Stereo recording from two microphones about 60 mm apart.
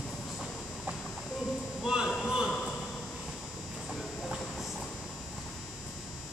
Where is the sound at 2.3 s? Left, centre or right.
Centre.